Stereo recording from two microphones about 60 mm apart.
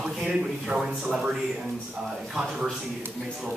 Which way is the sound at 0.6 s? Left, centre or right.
Centre.